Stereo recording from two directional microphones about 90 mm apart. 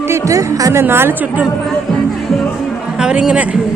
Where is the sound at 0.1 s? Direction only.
40° right (ahead or behind); by 1.5 s 20° right (ahead or behind).